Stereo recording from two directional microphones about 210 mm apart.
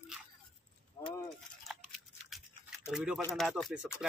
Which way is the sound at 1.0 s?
15° left (ahead or behind).